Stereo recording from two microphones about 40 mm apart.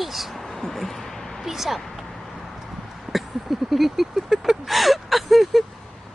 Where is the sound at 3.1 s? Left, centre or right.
Centre.